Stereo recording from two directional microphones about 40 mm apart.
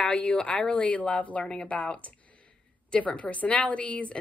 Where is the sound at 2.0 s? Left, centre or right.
Left.